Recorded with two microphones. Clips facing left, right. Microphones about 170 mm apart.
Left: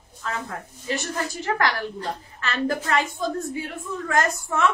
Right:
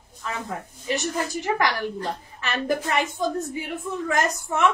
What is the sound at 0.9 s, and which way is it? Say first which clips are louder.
A woman's voice: right 2 dB; 20° right (ahead or behind).